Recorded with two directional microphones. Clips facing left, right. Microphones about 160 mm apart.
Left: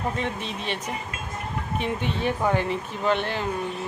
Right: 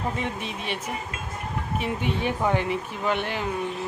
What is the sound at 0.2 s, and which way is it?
Speech, 10° right (ahead or behind).